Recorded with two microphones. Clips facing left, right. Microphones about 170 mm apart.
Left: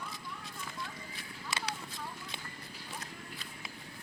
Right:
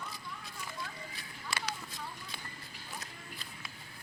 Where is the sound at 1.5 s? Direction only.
20° left (ahead or behind).